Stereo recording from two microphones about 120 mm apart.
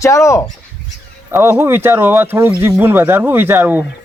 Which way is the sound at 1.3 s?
20° right (ahead or behind).